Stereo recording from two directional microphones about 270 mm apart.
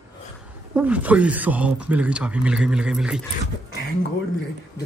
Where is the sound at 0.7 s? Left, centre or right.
Centre.